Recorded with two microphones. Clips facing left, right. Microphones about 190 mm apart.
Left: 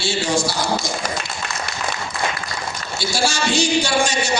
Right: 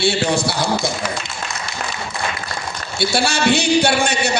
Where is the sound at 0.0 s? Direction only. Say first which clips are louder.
Right 3 dB; 60° right (ahead or behind).